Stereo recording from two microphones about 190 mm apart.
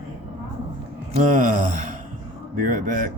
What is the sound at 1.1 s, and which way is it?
Speech, 40° right (ahead or behind).